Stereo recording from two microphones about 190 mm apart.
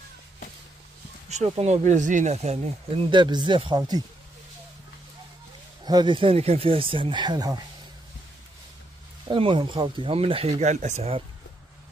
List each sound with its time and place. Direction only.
1.3 s speech: 35° right (ahead or behind); by 4.0 s 20° right (ahead or behind)
5.9 s speech: 25° right (ahead or behind)
9.3 s speech: 25° right (ahead or behind)